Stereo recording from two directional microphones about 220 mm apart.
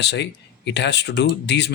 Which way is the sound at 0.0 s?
50° left (ahead or behind).